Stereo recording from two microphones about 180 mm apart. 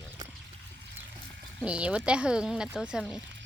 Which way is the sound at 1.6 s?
5° right (ahead or behind).